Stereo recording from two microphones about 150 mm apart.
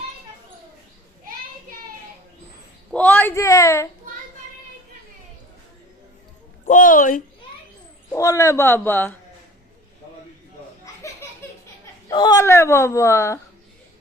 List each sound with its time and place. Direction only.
2.9 s speech: 10° left (ahead or behind)
6.7 s a sound: 60° left (ahead or behind)
8.1 s speech: 20° left (ahead or behind)
11.2 s a sound: 15° left (ahead or behind)
12.1 s speech: 30° left (ahead or behind)
12.4 s a woman's voice: 20° left (ahead or behind)